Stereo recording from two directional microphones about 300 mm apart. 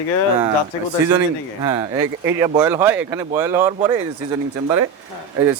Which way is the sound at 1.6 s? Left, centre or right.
Centre.